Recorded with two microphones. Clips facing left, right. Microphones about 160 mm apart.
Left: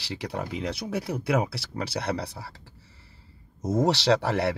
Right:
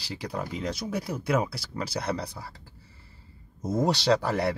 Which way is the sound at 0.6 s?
65° left (ahead or behind).